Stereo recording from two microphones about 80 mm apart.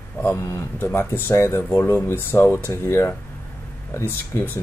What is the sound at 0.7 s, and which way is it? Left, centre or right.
Speech, left.